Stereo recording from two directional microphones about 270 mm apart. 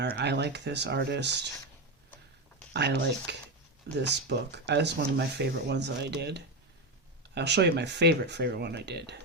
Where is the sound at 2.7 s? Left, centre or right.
Right.